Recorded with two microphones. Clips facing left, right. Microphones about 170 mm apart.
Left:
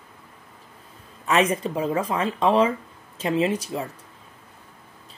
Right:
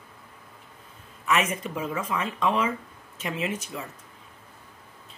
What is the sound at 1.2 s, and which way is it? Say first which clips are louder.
Speech: left 5 dB; 30° left (ahead or behind).